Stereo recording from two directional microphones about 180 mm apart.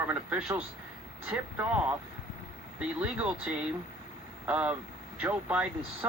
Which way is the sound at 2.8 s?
5° right (ahead or behind).